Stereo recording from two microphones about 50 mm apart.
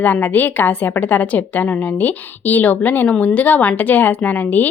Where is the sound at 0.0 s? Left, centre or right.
Left.